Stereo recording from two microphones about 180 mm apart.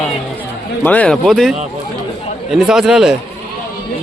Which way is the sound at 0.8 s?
10° left (ahead or behind).